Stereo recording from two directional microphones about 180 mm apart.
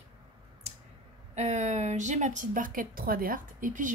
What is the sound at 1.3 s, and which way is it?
A woman's voice, 40° right (ahead or behind).